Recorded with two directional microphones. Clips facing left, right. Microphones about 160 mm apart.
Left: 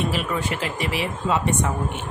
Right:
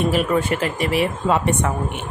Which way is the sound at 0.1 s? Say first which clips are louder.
Right 6 dB; 50° right (ahead or behind).